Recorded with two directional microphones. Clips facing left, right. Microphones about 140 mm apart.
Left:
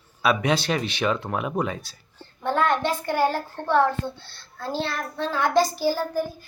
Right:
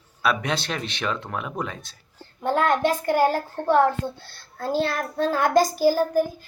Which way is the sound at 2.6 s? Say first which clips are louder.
Right 2 dB; 40° right (ahead or behind).